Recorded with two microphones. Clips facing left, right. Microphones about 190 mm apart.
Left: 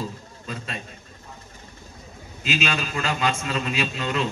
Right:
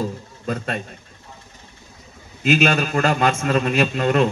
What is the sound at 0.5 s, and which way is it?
Speech, 55° right (ahead or behind).